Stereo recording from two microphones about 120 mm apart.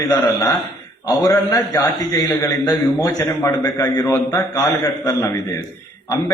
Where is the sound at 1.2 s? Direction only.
30° left (ahead or behind).